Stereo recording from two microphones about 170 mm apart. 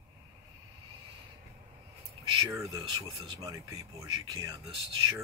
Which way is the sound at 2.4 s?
20° right (ahead or behind).